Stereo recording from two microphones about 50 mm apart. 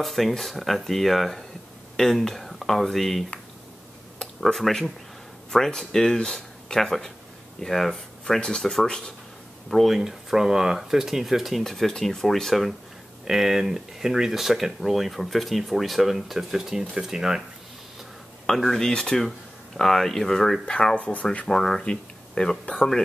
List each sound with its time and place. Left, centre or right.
0.0 s speech: centre
9.7 s speech: centre
11.6 s speech: centre
18.5 s speech: centre; by 21.5 s left
21.5 s speech: centre